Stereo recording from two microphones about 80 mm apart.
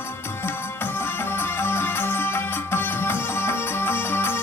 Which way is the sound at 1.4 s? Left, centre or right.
Left.